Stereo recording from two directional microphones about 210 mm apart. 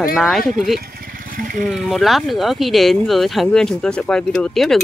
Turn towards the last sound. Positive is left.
turn(degrees=0)  # may be behind; listen again after turning